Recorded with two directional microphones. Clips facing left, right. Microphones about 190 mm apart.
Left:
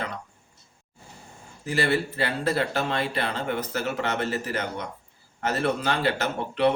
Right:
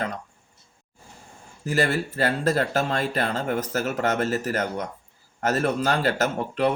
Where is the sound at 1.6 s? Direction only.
45° right (ahead or behind).